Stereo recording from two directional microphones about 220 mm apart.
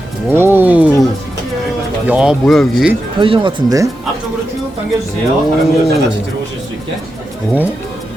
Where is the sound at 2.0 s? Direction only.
5° right (ahead or behind).